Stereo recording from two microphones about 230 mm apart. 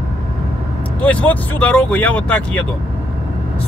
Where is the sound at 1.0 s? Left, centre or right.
Centre.